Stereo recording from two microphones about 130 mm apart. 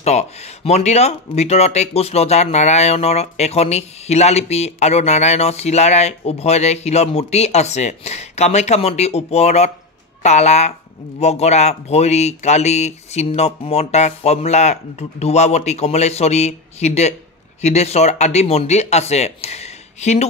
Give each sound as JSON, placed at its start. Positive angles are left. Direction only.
{"t": 0.0, "sound": "speech", "side_deg": 55}